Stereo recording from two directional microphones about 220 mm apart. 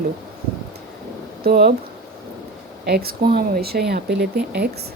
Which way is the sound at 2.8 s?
45° right (ahead or behind).